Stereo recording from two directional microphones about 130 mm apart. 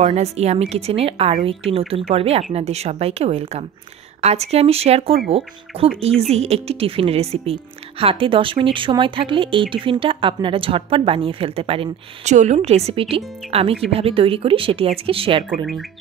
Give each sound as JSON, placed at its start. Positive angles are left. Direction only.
{"t": 0.0, "sound": "speech", "side_deg": -60}
{"t": 12.4, "sound": "speech", "side_deg": -60}